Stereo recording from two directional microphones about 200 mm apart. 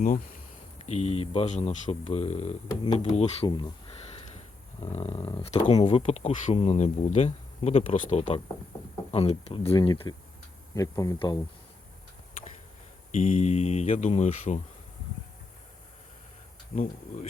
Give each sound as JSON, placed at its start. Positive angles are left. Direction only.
{"t": 0.8, "sound": "speech", "side_deg": 30}
{"t": 2.8, "sound": "speech", "side_deg": 20}
{"t": 3.1, "sound": "speech", "side_deg": 30}
{"t": 13.1, "sound": "speech", "side_deg": 35}
{"t": 16.7, "sound": "speech", "side_deg": 35}